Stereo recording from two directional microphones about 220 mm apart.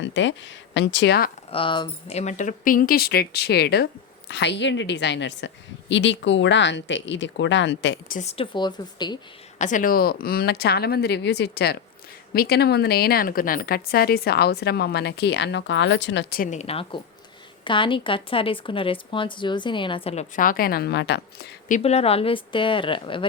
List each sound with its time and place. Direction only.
0.0 s speech: 55° left (ahead or behind)
1.5 s a woman's voice: 25° left (ahead or behind); by 8.1 s 55° left (ahead or behind)
8.1 s speech: 30° left (ahead or behind)
9.6 s a woman's voice: 35° left (ahead or behind); by 21.2 s 50° left (ahead or behind)
21.7 s speech: 30° left (ahead or behind)